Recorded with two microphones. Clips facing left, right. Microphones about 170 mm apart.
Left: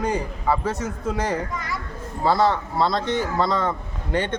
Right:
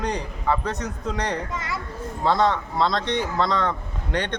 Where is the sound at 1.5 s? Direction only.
25° right (ahead or behind).